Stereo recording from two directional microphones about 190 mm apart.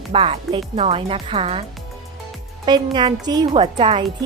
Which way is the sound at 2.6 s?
25° right (ahead or behind).